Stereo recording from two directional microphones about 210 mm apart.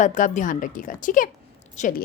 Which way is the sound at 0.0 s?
35° left (ahead or behind).